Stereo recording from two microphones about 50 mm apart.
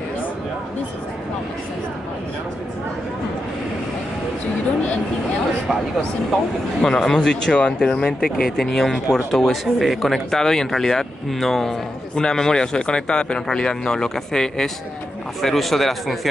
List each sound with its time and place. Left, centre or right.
6.8 s speech: centre